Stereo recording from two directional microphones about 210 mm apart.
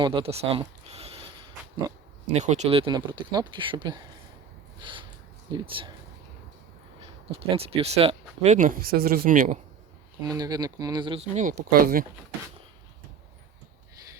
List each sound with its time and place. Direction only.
0.0 s speech: 25° right (ahead or behind)
2.3 s speech: 35° right (ahead or behind)
4.8 s a sound: 25° right (ahead or behind)
5.5 s speech: 20° right (ahead or behind)
7.0 s speech: 25° right (ahead or behind)
10.2 s speech: 20° right (ahead or behind)
11.3 s speech: 40° right (ahead or behind)